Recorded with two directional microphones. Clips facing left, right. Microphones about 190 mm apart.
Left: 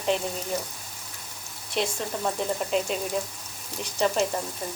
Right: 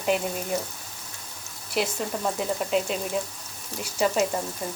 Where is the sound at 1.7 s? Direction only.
5° right (ahead or behind).